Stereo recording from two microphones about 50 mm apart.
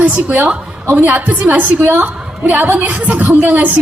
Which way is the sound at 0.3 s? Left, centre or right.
Right.